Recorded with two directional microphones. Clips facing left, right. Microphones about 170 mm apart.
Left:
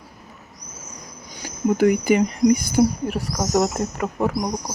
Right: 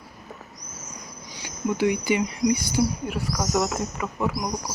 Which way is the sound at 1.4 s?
45° left (ahead or behind).